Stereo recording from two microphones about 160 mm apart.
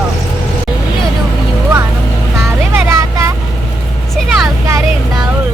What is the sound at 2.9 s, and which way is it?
Vehicle, 15° right (ahead or behind).